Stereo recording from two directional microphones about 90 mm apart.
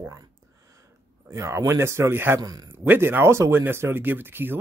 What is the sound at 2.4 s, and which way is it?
Speech, 45° right (ahead or behind).